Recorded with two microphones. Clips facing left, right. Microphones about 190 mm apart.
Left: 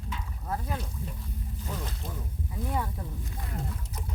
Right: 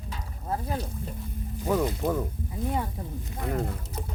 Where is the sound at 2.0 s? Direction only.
90° right.